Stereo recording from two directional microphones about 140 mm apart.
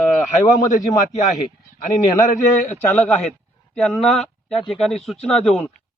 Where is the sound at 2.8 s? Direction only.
10° left (ahead or behind).